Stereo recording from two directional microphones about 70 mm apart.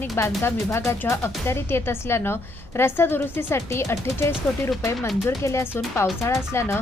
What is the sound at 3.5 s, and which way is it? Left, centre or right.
Speech, left.